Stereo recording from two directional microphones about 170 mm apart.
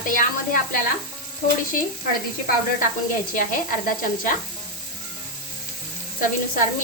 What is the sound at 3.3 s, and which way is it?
Sizzle, 55° left (ahead or behind).